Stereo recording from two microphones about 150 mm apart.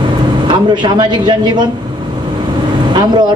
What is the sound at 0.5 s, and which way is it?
A man's voice, 30° right (ahead or behind).